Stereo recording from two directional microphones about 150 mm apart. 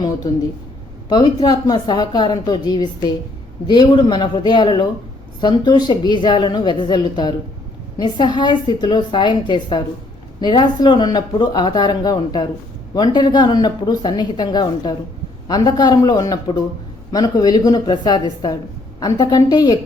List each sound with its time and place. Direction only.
0.0 s a woman's voice: 25° left (ahead or behind)